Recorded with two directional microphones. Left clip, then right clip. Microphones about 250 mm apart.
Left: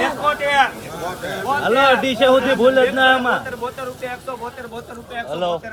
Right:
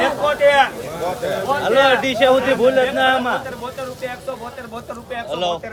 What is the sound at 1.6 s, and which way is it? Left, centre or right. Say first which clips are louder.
A man's voice: even; left.